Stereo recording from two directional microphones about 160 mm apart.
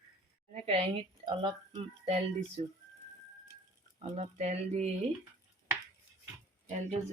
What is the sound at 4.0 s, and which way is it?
Speech, 40° right (ahead or behind).